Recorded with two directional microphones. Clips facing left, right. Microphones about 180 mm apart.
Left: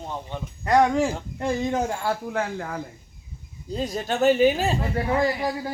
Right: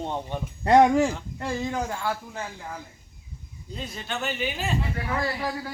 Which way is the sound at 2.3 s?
75° left (ahead or behind).